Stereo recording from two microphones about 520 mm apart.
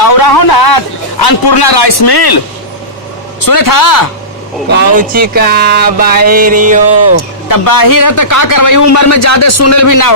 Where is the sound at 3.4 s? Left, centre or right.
Left.